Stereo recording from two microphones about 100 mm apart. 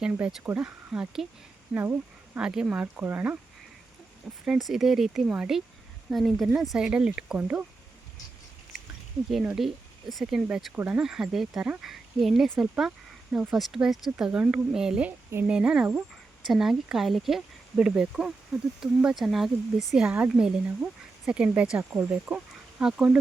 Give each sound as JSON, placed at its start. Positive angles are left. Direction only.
{"t": 0.0, "sound": "speech", "side_deg": -5}
{"t": 1.7, "sound": "speech", "side_deg": -20}
{"t": 2.4, "sound": "speech", "side_deg": -5}
{"t": 2.8, "sound": "speech", "side_deg": -20}
{"t": 4.4, "sound": "speech", "side_deg": -5}
{"t": 9.6, "sound": "speech", "side_deg": 0}
{"t": 22.8, "sound": "speech", "side_deg": -5}